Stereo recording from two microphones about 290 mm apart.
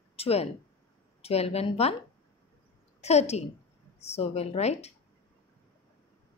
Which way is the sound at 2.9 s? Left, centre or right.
Left.